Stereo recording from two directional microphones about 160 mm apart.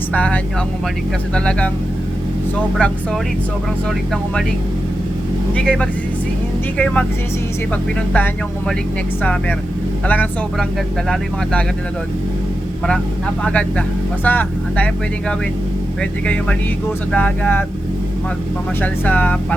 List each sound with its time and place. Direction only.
0.1 s speech: 10° left (ahead or behind)
1.5 s speech: 10° left (ahead or behind)
2.7 s speech: 5° left (ahead or behind)
5.5 s speech: 5° left (ahead or behind)
8.1 s speech: 10° left (ahead or behind)
13.4 s speech: 10° left (ahead or behind)
16.0 s speech: 5° left (ahead or behind)
18.8 s speech: 10° left (ahead or behind)